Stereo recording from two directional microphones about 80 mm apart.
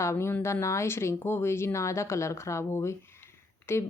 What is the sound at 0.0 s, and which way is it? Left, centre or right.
Speech, left.